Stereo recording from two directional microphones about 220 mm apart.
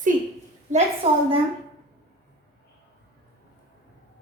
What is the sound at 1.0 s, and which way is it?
Speech, 25° right (ahead or behind).